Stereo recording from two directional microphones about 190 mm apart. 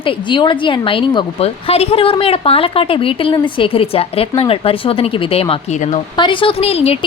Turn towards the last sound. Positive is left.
turn(degrees=30)  # may be behind; listen again after turning